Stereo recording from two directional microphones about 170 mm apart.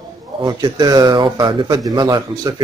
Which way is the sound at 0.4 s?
25° right (ahead or behind).